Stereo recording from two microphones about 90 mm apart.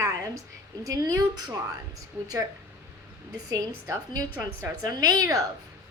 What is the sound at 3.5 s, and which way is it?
A woman's voice, 45° right (ahead or behind).